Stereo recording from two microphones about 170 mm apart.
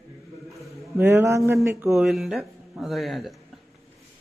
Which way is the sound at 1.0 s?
15° right (ahead or behind).